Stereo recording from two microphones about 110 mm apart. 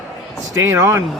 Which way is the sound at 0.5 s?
30° right (ahead or behind).